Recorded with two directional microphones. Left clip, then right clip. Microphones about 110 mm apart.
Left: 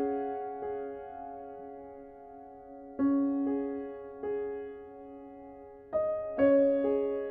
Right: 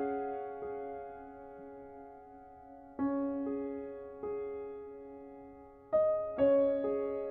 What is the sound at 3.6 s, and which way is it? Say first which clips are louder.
Music: left 4 dB; 35° left (ahead or behind).